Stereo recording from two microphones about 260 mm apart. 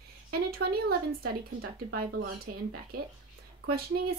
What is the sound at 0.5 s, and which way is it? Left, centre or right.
Speech, right.